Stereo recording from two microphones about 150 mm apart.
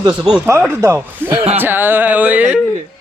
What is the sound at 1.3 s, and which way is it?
Speech, 40° right (ahead or behind).